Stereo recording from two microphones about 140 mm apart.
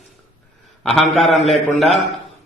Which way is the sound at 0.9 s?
Centre (ahead or behind).